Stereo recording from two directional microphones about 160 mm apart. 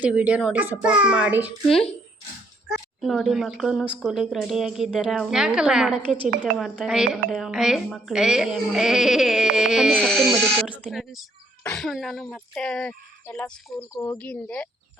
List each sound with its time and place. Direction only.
0.0 s a child's voice: 10° right (ahead or behind)
2.6 s a woman's voice: centre (ahead or behind); by 14.2 s 20° left (ahead or behind)
14.2 s speech: 10° left (ahead or behind)